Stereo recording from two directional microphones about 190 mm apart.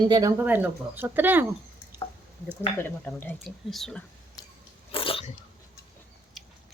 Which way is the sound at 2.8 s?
10° left (ahead or behind).